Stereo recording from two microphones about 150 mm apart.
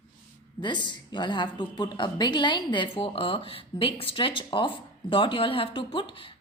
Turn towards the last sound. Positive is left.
turn(degrees=35)  # may be behind; listen again after turning